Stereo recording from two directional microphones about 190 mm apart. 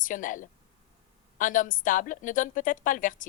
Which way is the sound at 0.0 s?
45° left (ahead or behind).